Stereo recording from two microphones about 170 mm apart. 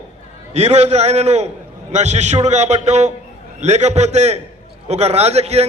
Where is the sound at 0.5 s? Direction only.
40° right (ahead or behind).